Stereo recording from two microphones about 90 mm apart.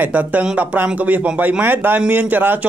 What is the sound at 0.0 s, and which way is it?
Speech, 15° right (ahead or behind).